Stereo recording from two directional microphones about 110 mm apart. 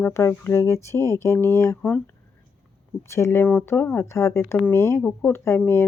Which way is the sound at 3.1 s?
25° left (ahead or behind).